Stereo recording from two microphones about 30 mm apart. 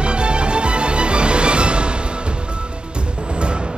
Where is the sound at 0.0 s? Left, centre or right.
Right.